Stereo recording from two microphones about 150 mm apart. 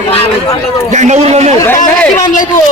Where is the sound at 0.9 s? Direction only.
50° right (ahead or behind).